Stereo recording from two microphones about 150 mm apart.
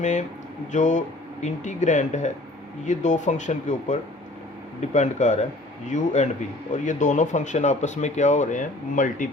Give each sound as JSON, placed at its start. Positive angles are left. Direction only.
{"t": 0.0, "sound": "speech", "side_deg": 50}